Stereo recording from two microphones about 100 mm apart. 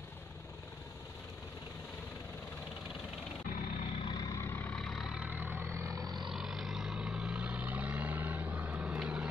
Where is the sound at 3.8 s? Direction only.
55° left (ahead or behind).